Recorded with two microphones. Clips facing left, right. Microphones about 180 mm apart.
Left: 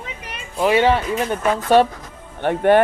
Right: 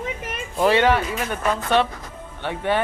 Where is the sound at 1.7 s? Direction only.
45° left (ahead or behind).